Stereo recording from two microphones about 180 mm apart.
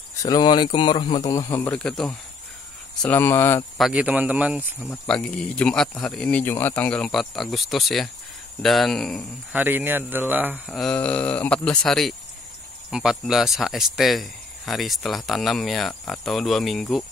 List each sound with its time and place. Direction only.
0.2 s speech: 25° left (ahead or behind)
3.7 s speech: 5° right (ahead or behind)
4.8 s speech: 5° left (ahead or behind)
9.5 s speech: 10° right (ahead or behind)
10.7 s speech: 5° left (ahead or behind)